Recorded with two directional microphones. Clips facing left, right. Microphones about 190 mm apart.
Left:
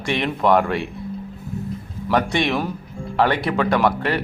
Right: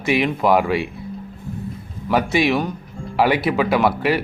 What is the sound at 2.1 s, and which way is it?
A man's voice, 5° right (ahead or behind).